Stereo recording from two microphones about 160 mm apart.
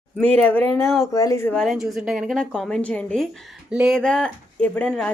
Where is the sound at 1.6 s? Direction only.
Centre (ahead or behind).